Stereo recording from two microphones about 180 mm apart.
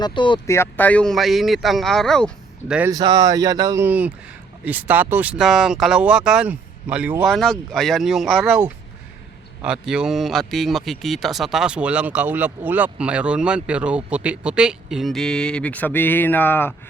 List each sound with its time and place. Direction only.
0.0 s speech: 25° left (ahead or behind)
0.4 s speech: 15° left (ahead or behind)
2.9 s speech: 20° right (ahead or behind); by 8.6 s centre (ahead or behind)
9.6 s speech: 5° right (ahead or behind); by 16.7 s 10° left (ahead or behind)